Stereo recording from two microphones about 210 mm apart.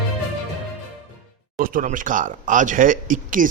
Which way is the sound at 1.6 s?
40° right (ahead or behind).